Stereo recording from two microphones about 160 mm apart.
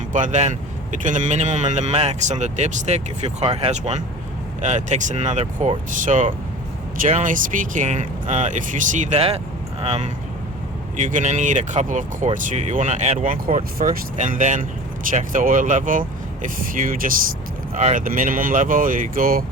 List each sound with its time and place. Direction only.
0.1 s speech: 50° right (ahead or behind)
13.7 s speech: 60° right (ahead or behind)
17.7 s speech: 50° right (ahead or behind)